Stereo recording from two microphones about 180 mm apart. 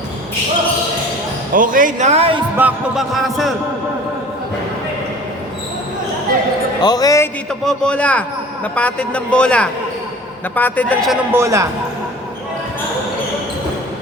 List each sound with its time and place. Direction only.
1.5 s speech: 50° right (ahead or behind); by 2.4 s 35° right (ahead or behind)
2.6 s speech: 5° right (ahead or behind)
6.8 s a man's voice: 20° left (ahead or behind)
7.6 s a man's voice: 5° left (ahead or behind)
11.3 s a man's voice: 15° right (ahead or behind)